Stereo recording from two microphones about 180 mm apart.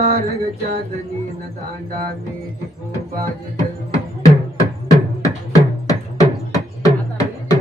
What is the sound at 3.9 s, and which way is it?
Music, 20° left (ahead or behind).